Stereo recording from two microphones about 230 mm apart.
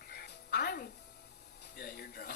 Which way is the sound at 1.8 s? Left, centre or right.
Left.